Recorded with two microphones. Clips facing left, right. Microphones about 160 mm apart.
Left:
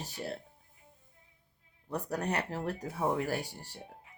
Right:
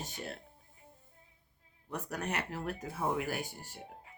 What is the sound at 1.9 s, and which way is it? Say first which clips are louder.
Speech: left 4 dB; 35° left (ahead or behind).